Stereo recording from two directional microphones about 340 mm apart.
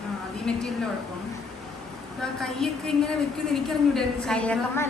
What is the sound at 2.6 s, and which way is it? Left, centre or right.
A woman's voice, centre.